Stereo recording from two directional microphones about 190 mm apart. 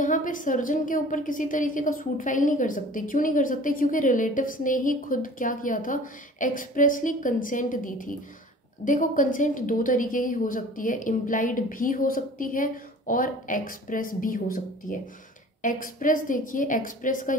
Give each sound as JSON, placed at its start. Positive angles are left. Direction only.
{"t": 0.0, "sound": "a woman's voice", "side_deg": 45}